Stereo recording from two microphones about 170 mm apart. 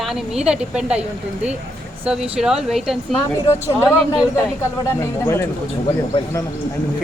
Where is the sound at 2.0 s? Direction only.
5° right (ahead or behind).